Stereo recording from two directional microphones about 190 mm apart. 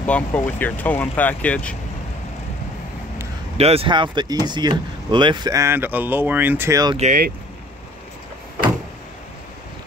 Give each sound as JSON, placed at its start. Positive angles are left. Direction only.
{"t": 0.0, "sound": "speech", "side_deg": 10}
{"t": 3.5, "sound": "speech", "side_deg": -30}
{"t": 7.0, "sound": "speech", "side_deg": -45}